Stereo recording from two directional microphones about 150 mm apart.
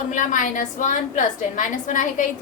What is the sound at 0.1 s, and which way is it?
A woman's voice, 60° left (ahead or behind).